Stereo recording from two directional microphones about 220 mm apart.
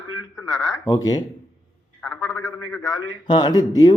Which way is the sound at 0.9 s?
15° left (ahead or behind).